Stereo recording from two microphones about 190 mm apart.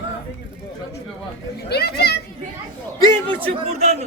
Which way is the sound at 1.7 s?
60° left (ahead or behind).